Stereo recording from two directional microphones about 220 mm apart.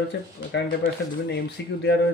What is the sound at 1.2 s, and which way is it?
Speech, 50° left (ahead or behind).